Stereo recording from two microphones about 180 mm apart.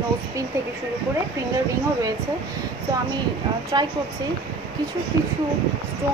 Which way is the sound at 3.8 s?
25° right (ahead or behind).